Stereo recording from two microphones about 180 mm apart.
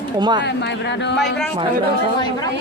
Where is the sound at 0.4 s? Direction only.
70° left (ahead or behind).